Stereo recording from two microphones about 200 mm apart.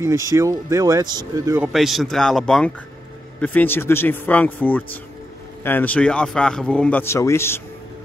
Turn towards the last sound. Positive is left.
turn(degrees=10)  # may be behind; listen again after turning